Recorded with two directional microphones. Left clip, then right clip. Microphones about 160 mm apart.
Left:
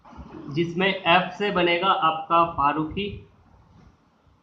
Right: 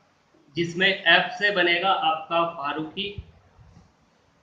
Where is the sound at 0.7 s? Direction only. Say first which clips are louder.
Right 1 dB; 40° left (ahead or behind).